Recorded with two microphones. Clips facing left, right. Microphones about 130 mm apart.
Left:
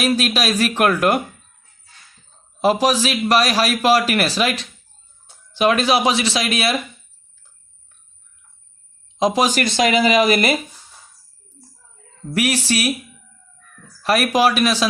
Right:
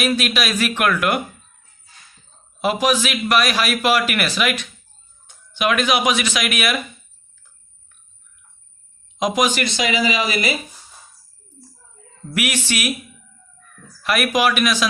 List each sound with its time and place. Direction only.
0.0 s a man's voice: 35° left (ahead or behind)
2.6 s a man's voice: 35° left (ahead or behind)
9.1 s speech: 30° left (ahead or behind); by 10.6 s 55° left (ahead or behind)
12.3 s a man's voice: 35° left (ahead or behind)
14.0 s a man's voice: 35° left (ahead or behind)